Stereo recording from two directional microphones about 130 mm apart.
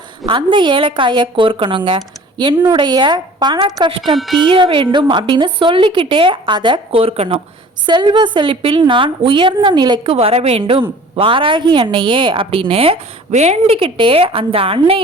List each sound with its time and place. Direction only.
0.3 s a woman's voice: 40° right (ahead or behind)
7.9 s a woman's voice: 35° right (ahead or behind)
10.2 s a woman's voice: 50° right (ahead or behind)